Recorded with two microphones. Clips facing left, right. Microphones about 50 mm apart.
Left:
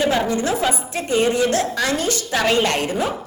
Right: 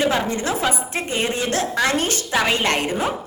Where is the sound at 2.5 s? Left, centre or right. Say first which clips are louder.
Left 2 dB; right.